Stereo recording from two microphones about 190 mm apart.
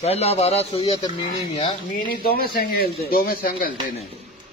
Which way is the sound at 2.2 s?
50° left (ahead or behind).